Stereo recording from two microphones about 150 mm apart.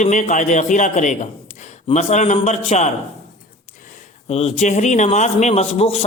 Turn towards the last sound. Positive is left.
turn(degrees=40)  # may be behind; listen again after turning